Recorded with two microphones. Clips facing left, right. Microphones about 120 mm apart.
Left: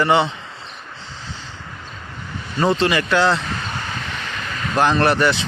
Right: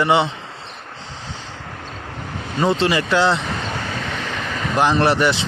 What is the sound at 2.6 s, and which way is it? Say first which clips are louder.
Speech: even; 25° right (ahead or behind).